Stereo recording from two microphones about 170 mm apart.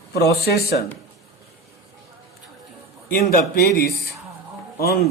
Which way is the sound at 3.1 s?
60° left (ahead or behind).